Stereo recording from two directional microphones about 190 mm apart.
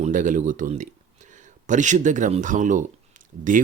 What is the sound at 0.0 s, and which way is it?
Speech, 40° right (ahead or behind).